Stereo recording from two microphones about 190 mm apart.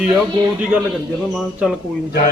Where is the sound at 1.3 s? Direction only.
Centre (ahead or behind).